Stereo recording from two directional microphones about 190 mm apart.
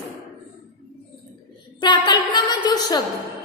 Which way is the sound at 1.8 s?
25° left (ahead or behind).